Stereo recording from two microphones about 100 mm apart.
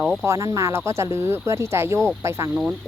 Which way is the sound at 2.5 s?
10° right (ahead or behind).